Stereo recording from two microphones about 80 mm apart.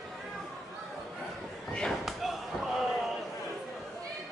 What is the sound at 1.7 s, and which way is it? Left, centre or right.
Slam, centre.